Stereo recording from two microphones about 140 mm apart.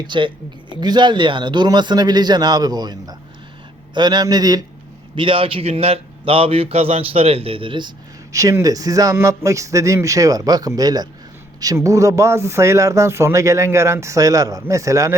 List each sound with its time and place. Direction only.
0.0 s speech: 35° right (ahead or behind)
5.1 s speech: 40° right (ahead or behind)
8.3 s speech: 25° right (ahead or behind)